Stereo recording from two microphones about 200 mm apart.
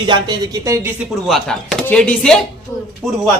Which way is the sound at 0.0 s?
20° right (ahead or behind).